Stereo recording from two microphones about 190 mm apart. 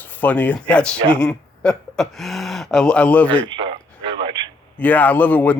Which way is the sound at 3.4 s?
25° right (ahead or behind).